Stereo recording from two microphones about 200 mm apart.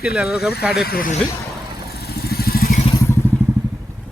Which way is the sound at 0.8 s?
45° left (ahead or behind).